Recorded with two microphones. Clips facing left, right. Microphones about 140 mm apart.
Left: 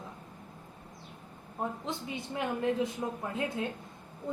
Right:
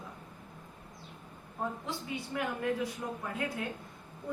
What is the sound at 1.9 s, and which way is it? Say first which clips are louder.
A woman's voice: left 1 dB; 20° left (ahead or behind).